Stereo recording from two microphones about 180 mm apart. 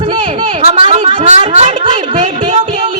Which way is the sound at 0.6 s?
35° right (ahead or behind).